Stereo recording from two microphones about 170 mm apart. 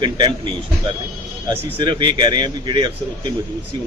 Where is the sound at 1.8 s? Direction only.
25° right (ahead or behind).